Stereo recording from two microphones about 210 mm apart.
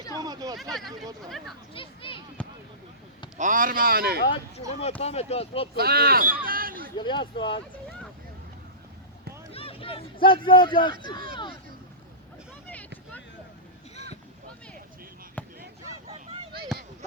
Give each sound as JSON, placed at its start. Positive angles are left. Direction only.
{"t": 0.2, "sound": "a sound", "side_deg": -15}
{"t": 0.5, "sound": "speech", "side_deg": 0}
{"t": 1.7, "sound": "speech", "side_deg": 25}
{"t": 3.3, "sound": "speech", "side_deg": -40}
{"t": 4.8, "sound": "speech", "side_deg": 30}
{"t": 5.7, "sound": "speech", "side_deg": -45}
{"t": 6.9, "sound": "speech", "side_deg": 20}
{"t": 9.5, "sound": "speech", "side_deg": 25}
{"t": 15.4, "sound": "basketball bounce", "side_deg": 10}
{"t": 16.0, "sound": "a sound", "side_deg": -30}